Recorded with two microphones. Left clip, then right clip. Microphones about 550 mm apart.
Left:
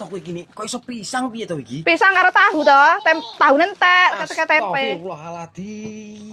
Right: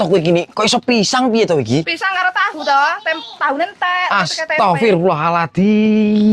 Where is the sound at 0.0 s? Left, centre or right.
Right.